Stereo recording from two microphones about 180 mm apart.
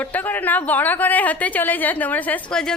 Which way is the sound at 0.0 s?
10° left (ahead or behind).